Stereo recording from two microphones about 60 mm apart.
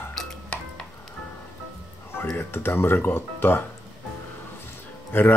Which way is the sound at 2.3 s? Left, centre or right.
Left.